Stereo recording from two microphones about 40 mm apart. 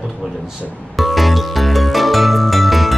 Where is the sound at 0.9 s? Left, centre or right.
Centre.